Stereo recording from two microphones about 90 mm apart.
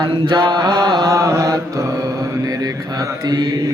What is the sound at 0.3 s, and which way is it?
Mantra, 55° right (ahead or behind).